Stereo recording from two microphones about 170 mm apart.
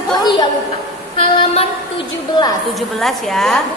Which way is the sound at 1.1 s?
30° left (ahead or behind).